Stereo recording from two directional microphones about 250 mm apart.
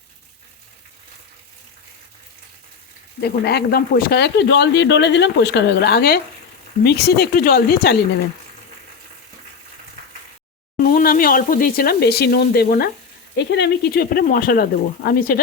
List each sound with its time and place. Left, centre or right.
3.2 s speech: left
10.8 s speech: left